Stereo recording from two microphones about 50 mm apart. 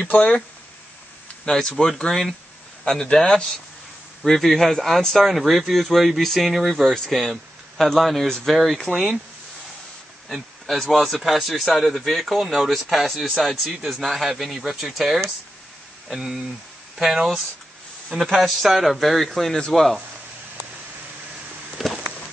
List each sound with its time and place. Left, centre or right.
0.0 s speech: left
1.4 s a man's voice: centre
1.9 s a man's voice: centre
10.2 s a sound: centre
10.9 s speech: centre
14.8 s speech: centre
16.1 s speech: centre
21.8 s a sound: centre